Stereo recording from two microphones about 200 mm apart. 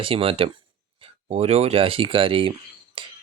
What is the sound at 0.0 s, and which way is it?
Speech, 30° right (ahead or behind).